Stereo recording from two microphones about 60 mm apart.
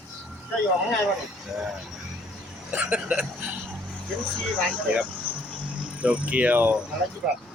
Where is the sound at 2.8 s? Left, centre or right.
Centre.